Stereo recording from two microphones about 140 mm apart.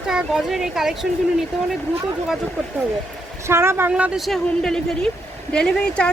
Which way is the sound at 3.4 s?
20° right (ahead or behind).